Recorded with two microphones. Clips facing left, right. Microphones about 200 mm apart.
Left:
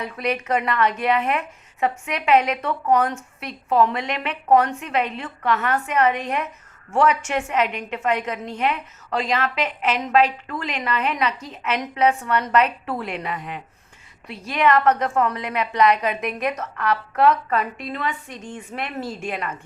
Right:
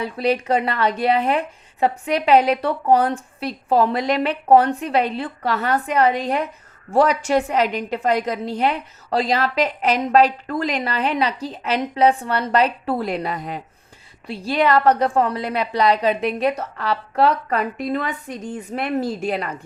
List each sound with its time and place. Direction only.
0.0 s a woman's voice: 30° right (ahead or behind)